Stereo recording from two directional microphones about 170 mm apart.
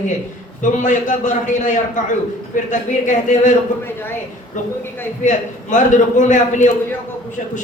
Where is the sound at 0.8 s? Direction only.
45° left (ahead or behind).